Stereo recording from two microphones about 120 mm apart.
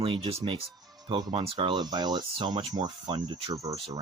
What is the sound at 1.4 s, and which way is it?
Speech, 50° right (ahead or behind).